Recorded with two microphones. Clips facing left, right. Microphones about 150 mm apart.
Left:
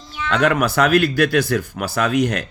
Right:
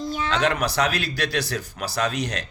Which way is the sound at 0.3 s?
55° left (ahead or behind).